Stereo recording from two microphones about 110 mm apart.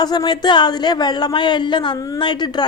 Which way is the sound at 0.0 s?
40° left (ahead or behind).